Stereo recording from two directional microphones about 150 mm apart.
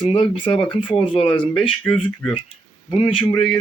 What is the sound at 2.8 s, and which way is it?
Speech, 35° left (ahead or behind).